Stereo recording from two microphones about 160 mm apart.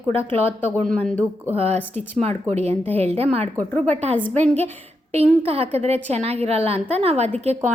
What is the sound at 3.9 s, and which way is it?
A woman's voice, 45° right (ahead or behind).